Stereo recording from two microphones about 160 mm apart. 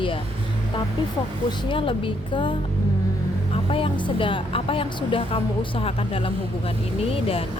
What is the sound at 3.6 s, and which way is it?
A woman's voice, 35° left (ahead or behind).